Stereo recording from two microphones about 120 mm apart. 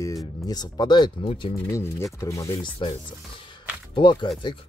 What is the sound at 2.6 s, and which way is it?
Speech, 40° left (ahead or behind).